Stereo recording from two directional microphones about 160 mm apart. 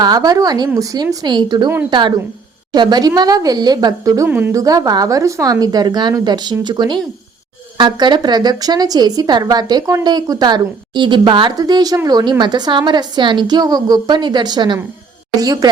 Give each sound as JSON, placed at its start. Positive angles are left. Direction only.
{"t": 0.0, "sound": "a woman's voice", "side_deg": -25}
{"t": 4.6, "sound": "a woman's voice", "side_deg": -20}